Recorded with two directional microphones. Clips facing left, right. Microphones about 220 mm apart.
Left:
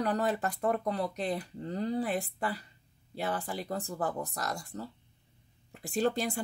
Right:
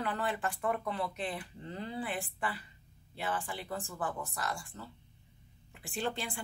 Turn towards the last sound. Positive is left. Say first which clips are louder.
# left 7 dB
turn(degrees=40)  # may be behind; listen again after turning